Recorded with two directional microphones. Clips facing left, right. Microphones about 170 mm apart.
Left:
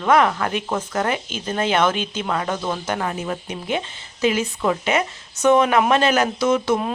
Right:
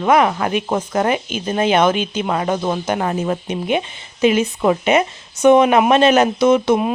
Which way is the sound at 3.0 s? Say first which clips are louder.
Right 6 dB; 35° right (ahead or behind).